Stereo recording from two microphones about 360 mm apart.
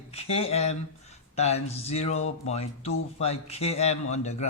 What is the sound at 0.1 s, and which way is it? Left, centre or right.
Speech, centre.